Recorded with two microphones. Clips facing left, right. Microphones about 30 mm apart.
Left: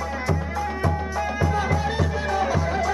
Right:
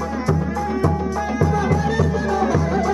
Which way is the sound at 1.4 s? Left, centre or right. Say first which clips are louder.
Right 5 dB; centre.